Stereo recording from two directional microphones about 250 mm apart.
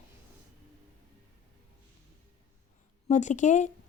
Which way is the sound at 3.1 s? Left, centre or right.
Left.